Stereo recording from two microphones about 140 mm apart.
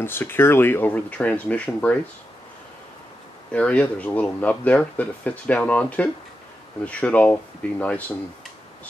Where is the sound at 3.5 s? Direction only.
10° left (ahead or behind).